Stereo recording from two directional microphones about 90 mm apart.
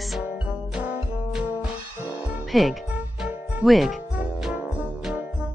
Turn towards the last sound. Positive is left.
turn(degrees=-15)  # may be behind; listen again after turning